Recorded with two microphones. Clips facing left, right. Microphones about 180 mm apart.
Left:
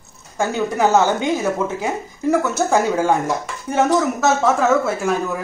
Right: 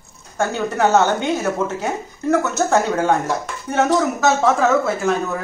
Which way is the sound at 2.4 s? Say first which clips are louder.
Even; 10° left (ahead or behind).